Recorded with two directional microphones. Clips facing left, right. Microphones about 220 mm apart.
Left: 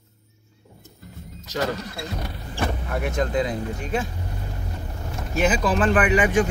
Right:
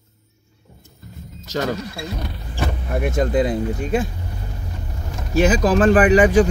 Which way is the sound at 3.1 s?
45° right (ahead or behind).